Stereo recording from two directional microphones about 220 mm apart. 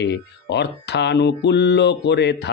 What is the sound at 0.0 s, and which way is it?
Speech, 50° left (ahead or behind).